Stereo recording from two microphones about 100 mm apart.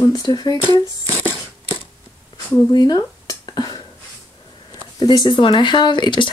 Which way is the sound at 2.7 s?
45° left (ahead or behind).